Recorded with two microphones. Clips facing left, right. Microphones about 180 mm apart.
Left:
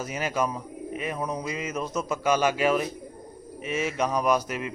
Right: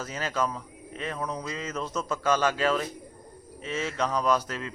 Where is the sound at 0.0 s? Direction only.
15° left (ahead or behind).